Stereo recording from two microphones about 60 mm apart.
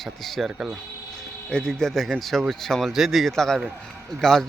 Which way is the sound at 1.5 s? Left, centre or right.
Centre.